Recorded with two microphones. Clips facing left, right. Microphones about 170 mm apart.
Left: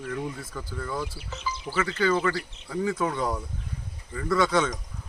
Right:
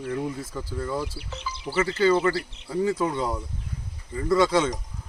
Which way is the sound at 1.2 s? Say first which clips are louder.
Left 2 dB; 65° right (ahead or behind).